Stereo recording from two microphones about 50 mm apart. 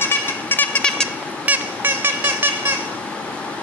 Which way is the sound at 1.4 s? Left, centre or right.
Right.